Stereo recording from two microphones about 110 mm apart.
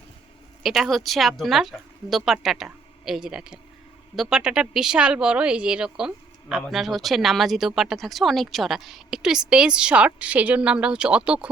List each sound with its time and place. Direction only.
0.6 s a woman's voice: centre (ahead or behind)